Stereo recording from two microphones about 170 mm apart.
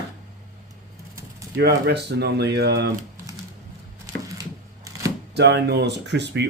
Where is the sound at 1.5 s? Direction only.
70° right (ahead or behind).